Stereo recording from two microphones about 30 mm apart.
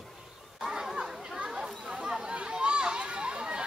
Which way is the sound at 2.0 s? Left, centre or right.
Right.